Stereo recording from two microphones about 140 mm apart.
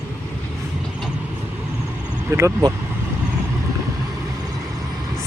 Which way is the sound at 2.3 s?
25° right (ahead or behind).